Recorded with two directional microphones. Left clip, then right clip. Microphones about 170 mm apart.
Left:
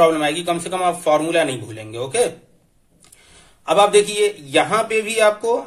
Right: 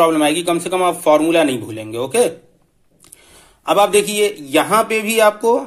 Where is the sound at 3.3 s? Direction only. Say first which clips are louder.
Right 2 dB; 40° right (ahead or behind).